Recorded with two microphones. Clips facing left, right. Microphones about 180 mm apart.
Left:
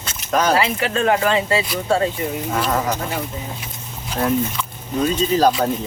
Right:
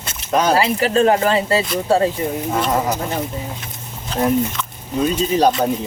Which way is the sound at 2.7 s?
20° right (ahead or behind).